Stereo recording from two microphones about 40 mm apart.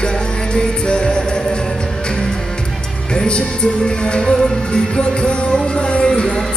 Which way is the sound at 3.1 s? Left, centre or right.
Left.